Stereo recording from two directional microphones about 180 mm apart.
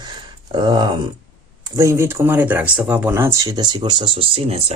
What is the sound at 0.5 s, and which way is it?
Speech, 25° right (ahead or behind).